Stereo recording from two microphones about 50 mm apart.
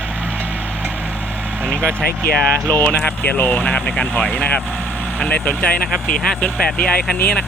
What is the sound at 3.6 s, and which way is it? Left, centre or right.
Speech, left.